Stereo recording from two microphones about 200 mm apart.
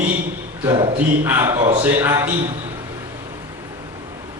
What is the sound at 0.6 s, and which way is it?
Speech, 20° right (ahead or behind).